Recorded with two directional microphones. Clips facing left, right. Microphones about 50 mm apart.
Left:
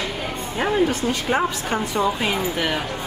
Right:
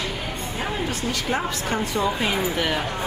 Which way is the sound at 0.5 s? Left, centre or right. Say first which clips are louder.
Left 9 dB; left.